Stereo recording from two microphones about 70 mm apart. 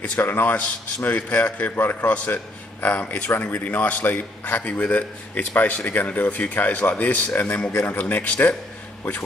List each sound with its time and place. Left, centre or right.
0.0 s a man's voice: left